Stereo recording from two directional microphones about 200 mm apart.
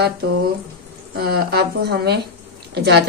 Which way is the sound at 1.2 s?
55° right (ahead or behind).